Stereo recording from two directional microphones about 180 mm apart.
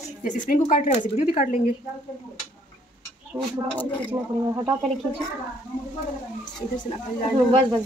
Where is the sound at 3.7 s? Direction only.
10° left (ahead or behind).